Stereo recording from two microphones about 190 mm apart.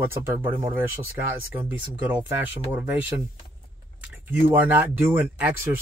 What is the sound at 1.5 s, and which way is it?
Speech, 10° right (ahead or behind).